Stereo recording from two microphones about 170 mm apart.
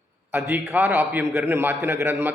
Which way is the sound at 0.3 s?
10° right (ahead or behind).